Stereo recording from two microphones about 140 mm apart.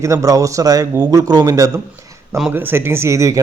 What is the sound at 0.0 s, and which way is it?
A man's voice, 25° right (ahead or behind).